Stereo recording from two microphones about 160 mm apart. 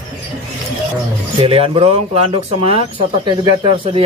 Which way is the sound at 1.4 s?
35° right (ahead or behind).